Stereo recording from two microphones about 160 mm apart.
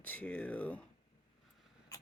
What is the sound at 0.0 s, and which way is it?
Speech, 10° left (ahead or behind).